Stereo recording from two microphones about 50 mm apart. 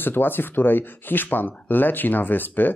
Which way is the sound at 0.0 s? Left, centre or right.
Left.